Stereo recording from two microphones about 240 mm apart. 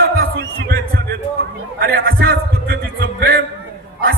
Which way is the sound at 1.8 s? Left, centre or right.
Right.